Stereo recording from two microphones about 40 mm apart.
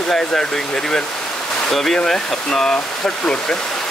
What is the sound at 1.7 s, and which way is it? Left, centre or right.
Speech, centre.